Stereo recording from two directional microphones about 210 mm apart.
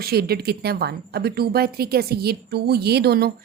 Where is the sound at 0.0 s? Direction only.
45° right (ahead or behind).